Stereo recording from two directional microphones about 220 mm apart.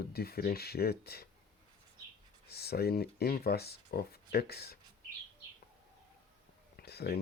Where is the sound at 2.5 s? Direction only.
45° left (ahead or behind).